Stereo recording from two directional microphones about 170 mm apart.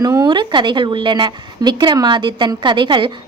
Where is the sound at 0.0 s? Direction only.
20° right (ahead or behind).